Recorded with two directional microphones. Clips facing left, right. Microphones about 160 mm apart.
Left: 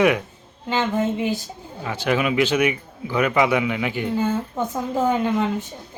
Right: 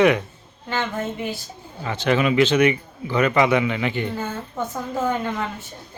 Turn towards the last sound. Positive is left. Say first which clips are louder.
# left 5 dB
turn(degrees=15)  # may be behind; listen again after turning